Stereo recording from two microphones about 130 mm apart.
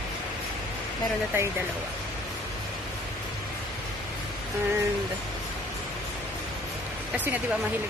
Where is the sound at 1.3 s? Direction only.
15° right (ahead or behind).